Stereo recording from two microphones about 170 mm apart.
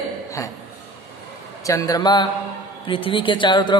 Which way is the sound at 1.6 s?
20° left (ahead or behind).